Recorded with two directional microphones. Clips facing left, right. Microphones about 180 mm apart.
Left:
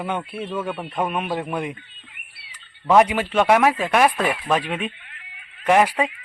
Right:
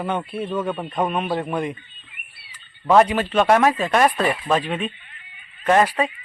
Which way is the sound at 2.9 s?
10° left (ahead or behind).